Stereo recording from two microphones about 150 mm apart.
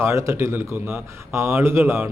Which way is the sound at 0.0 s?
20° right (ahead or behind).